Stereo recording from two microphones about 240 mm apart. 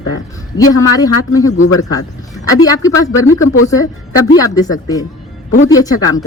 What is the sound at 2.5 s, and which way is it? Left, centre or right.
Speech, centre.